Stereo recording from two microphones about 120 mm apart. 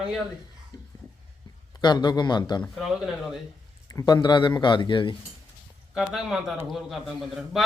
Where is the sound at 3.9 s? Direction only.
30° left (ahead or behind).